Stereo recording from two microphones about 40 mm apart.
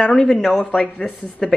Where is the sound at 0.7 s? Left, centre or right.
Left.